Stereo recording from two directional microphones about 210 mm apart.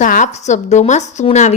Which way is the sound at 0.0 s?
35° left (ahead or behind).